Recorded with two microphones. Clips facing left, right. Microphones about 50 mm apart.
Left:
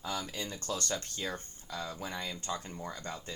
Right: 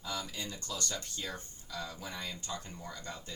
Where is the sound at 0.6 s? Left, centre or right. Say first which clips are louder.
Left 6 dB; left.